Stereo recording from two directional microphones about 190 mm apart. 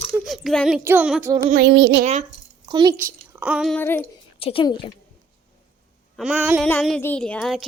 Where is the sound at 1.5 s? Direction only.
65° right (ahead or behind).